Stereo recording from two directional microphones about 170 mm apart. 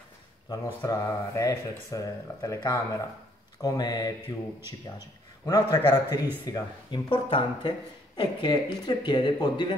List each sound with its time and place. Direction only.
0.8 s a man's voice: 20° left (ahead or behind)